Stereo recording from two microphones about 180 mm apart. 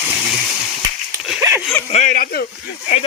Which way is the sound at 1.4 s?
15° right (ahead or behind).